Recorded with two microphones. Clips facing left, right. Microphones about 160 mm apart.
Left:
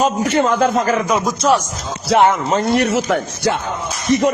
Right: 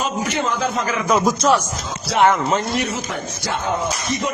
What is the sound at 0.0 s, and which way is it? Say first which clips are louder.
A man's voice: left 7 dB; 45° left (ahead or behind).